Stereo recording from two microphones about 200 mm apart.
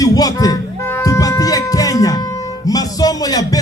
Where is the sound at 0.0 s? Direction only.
20° left (ahead or behind).